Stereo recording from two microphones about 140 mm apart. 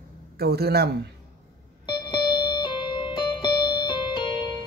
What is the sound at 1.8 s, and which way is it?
Music, 30° left (ahead or behind).